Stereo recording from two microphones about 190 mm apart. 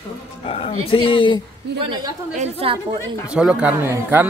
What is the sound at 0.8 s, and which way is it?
Speech, 30° left (ahead or behind).